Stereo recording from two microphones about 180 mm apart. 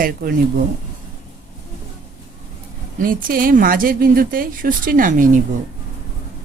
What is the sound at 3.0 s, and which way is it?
Speech, 50° right (ahead or behind).